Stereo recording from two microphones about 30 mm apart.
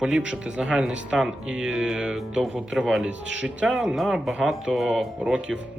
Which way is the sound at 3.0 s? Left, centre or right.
Right.